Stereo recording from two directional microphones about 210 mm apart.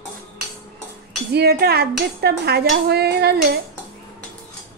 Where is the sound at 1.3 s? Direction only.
50° right (ahead or behind).